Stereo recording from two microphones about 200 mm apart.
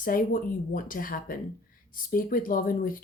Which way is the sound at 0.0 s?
45° left (ahead or behind).